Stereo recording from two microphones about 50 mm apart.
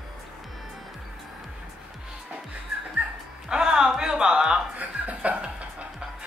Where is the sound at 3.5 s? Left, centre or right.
Centre.